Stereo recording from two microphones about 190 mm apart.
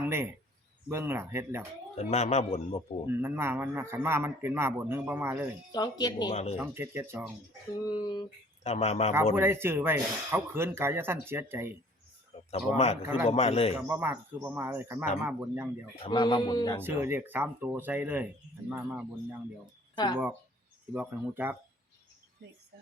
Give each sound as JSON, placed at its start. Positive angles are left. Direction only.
{"t": 0.0, "sound": "a man's voice", "side_deg": -10}
{"t": 2.0, "sound": "a man's voice", "side_deg": 35}
{"t": 3.1, "sound": "a man's voice", "side_deg": -10}
{"t": 5.7, "sound": "a man's voice", "side_deg": 20}
{"t": 6.3, "sound": "a man's voice", "side_deg": 35}
{"t": 6.6, "sound": "a man's voice", "side_deg": -10}
{"t": 7.9, "sound": "a man's voice", "side_deg": 20}
{"t": 8.6, "sound": "a man's voice", "side_deg": 35}
{"t": 9.3, "sound": "a man's voice", "side_deg": -10}
{"t": 12.5, "sound": "a man's voice", "side_deg": 35}
{"t": 13.7, "sound": "a man's voice", "side_deg": -10}
{"t": 16.0, "sound": "a man's voice", "side_deg": 25}
{"t": 16.8, "sound": "a man's voice", "side_deg": -10}
{"t": 20.9, "sound": "a man's voice", "side_deg": -10}